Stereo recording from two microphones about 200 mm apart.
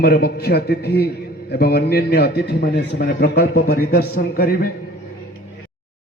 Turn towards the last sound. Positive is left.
turn(degrees=45)  # may be behind; listen again after turning